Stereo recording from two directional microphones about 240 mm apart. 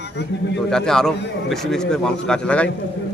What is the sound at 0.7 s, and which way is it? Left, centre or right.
A man's voice, centre.